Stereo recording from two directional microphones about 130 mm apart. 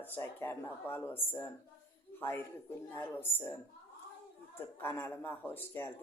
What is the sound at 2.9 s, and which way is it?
Speech, 15° left (ahead or behind).